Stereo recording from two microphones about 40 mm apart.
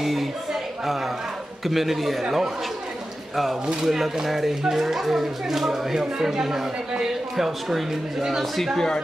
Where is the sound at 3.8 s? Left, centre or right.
Centre.